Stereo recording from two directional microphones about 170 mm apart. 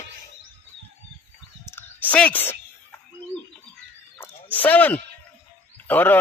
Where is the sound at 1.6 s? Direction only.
10° left (ahead or behind).